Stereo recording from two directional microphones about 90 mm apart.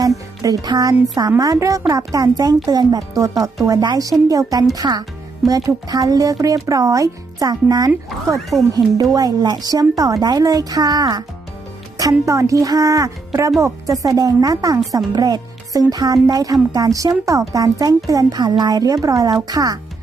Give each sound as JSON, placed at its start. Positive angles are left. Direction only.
{"t": 0.4, "sound": "speech", "side_deg": -45}